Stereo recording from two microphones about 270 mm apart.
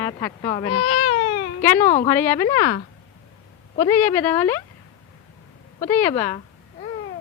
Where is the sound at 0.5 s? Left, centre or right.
Centre.